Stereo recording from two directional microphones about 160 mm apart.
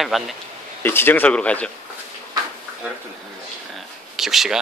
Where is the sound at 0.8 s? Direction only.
15° left (ahead or behind).